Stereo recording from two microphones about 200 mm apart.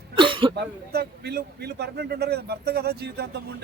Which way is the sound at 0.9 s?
50° right (ahead or behind).